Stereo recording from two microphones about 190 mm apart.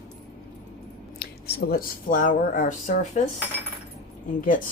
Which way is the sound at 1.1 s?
55° left (ahead or behind).